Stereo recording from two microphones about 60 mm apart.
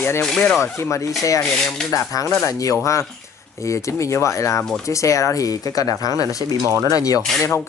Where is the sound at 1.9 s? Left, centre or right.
Left.